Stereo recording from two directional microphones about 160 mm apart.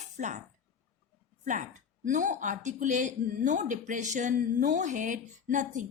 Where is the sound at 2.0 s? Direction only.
50° right (ahead or behind).